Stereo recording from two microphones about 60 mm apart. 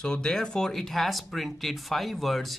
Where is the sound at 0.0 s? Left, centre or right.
Centre.